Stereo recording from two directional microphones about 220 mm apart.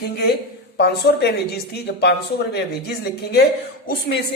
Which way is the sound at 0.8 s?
50° left (ahead or behind).